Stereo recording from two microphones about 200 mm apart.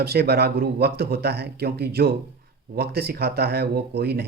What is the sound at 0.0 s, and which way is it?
Speech, 50° right (ahead or behind).